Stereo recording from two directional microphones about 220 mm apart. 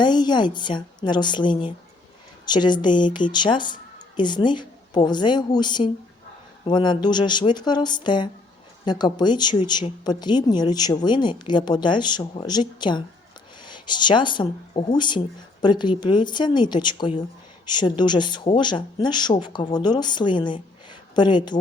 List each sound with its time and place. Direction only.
0.0 s speech: 20° left (ahead or behind)